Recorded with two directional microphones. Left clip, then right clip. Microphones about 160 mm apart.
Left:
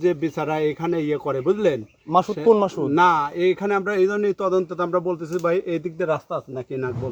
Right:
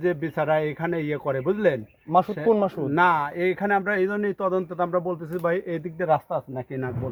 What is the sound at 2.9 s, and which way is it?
Speech, centre (ahead or behind).